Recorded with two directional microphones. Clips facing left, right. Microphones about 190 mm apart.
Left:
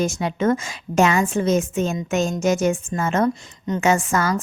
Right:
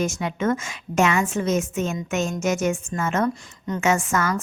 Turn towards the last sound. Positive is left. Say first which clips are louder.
# left 2 dB
turn(degrees=30)  # may be behind; listen again after turning